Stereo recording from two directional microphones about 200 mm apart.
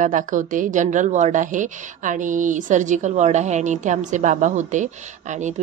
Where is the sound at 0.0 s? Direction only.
40° right (ahead or behind).